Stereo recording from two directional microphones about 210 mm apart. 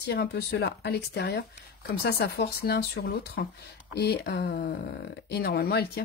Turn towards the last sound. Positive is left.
turn(degrees=50)  # may be behind; listen again after turning